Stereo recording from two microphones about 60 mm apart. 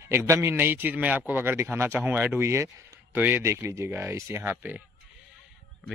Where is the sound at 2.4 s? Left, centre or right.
Right.